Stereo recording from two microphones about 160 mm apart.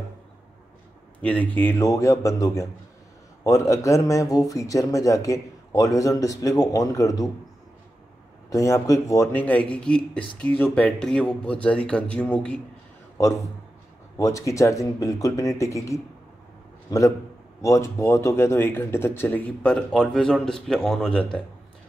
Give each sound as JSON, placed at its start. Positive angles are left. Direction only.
{"t": 1.2, "sound": "speech", "side_deg": 10}
{"t": 8.5, "sound": "speech", "side_deg": 20}
{"t": 14.1, "sound": "speech", "side_deg": 20}